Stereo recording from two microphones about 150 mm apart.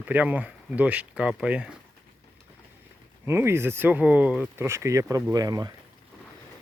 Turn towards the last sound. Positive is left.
turn(degrees=-25)  # may be behind; listen again after turning